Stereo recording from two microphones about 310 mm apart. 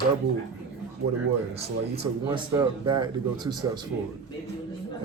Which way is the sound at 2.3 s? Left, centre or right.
Centre.